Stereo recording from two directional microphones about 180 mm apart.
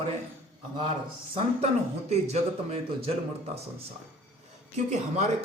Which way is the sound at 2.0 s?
35° right (ahead or behind).